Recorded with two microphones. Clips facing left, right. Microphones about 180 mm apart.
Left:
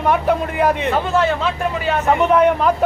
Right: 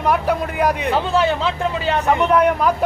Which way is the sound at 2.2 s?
5° left (ahead or behind).